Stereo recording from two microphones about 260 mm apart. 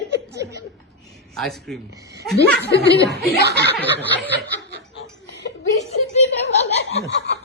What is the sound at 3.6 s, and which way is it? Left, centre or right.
Snicker, right.